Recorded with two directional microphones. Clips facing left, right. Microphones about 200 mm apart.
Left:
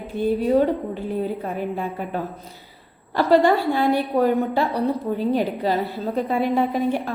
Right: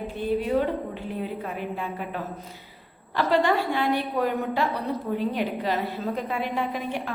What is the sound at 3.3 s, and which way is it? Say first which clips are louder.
A woman's voice: left 6 dB; 35° left (ahead or behind).